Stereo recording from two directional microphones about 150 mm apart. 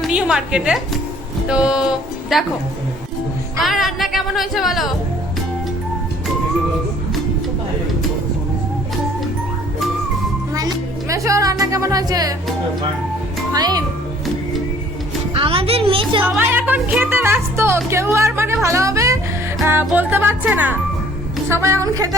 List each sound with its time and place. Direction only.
0.0 s a woman's voice: 5° right (ahead or behind)
3.6 s a woman's voice: centre (ahead or behind)
11.1 s a woman's voice: 20° right (ahead or behind)
13.5 s a woman's voice: 25° right (ahead or behind)
15.3 s a woman's voice: 35° right (ahead or behind)
16.2 s a woman's voice: 15° right (ahead or behind)